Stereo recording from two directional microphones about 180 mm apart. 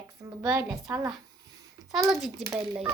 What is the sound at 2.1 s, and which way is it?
Speech, centre (ahead or behind).